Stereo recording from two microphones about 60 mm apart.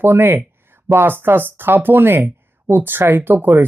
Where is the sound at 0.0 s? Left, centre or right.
Right.